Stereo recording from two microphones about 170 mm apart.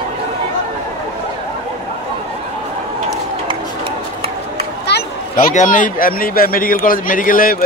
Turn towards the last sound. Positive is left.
turn(degrees=55)  # may be behind; listen again after turning